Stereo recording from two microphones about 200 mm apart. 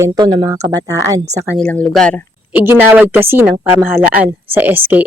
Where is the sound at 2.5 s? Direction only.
10° right (ahead or behind).